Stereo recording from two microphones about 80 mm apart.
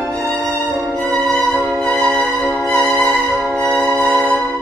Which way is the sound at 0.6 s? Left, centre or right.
Centre.